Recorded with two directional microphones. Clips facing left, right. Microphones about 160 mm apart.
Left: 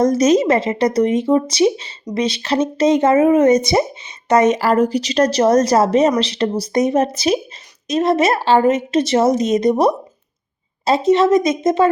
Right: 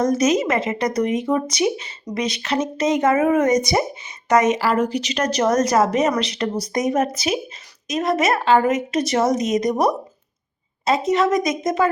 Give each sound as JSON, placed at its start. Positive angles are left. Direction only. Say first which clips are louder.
{"t": 0.0, "sound": "speech", "louder": "left 5 dB", "side_deg": 35}